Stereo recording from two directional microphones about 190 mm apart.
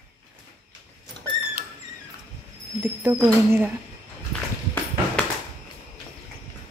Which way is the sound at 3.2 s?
10° right (ahead or behind).